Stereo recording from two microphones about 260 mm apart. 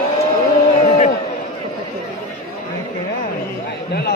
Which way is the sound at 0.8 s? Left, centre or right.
Left.